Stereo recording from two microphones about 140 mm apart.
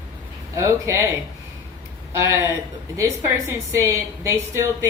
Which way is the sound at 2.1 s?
20° right (ahead or behind).